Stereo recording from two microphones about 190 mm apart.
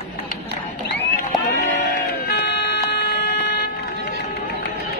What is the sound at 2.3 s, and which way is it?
Vehicle, 60° left (ahead or behind).